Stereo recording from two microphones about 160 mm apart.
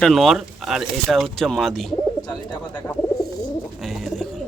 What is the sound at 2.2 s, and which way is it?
Speech, 25° left (ahead or behind).